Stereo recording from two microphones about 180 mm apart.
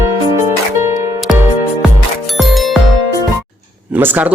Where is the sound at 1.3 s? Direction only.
Centre (ahead or behind).